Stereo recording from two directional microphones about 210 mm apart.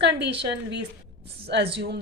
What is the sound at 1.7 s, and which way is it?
Speech, 50° right (ahead or behind).